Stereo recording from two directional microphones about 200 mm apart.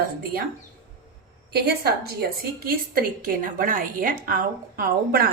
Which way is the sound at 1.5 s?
50° right (ahead or behind).